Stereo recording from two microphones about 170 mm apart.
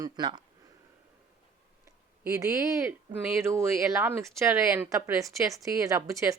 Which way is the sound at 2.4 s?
20° right (ahead or behind).